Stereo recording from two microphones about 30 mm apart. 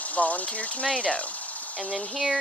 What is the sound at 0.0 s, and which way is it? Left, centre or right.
Speech, left.